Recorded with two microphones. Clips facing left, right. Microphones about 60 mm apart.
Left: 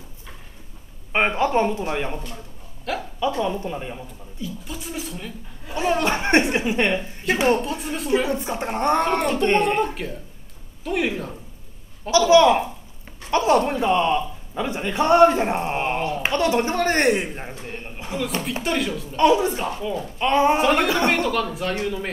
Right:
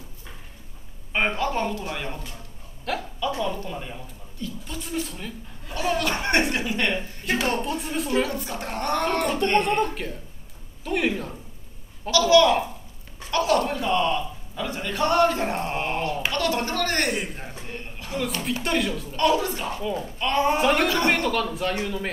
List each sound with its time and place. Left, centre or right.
1.1 s a man's voice: left
2.9 s speech: centre
3.3 s a man's voice: centre
4.4 s speech: centre
5.7 s a man's voice: left
7.5 s speech: centre
8.1 s a man's voice: centre
9.6 s speech: centre
12.1 s a man's voice: left
18.6 s speech: centre
19.1 s a man's voice: centre
20.5 s speech: centre
20.8 s a man's voice: left
21.1 s speech: centre